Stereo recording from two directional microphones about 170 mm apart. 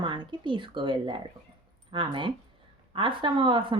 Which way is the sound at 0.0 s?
30° right (ahead or behind).